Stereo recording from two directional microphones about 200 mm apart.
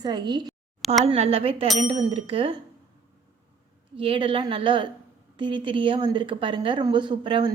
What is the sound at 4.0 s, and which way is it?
A woman's voice, 25° right (ahead or behind).